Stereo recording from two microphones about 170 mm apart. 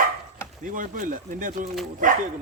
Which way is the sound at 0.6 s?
50° right (ahead or behind).